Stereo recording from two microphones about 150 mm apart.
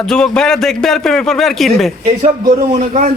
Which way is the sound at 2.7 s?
50° right (ahead or behind).